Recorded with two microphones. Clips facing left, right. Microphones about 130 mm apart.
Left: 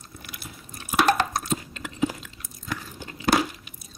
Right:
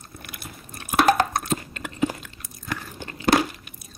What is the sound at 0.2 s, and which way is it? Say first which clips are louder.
Chewing: right 2 dB; 55° right (ahead or behind).